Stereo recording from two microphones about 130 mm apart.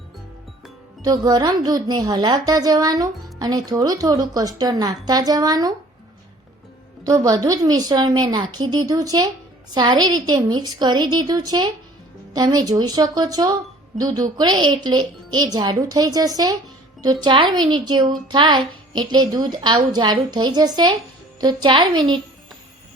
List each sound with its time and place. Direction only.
1.0 s a woman's voice: 30° right (ahead or behind)
7.0 s a woman's voice: 25° right (ahead or behind)